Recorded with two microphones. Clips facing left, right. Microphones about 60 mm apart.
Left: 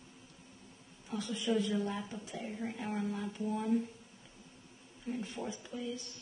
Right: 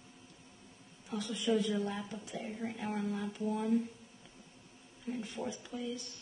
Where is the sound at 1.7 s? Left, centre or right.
Centre.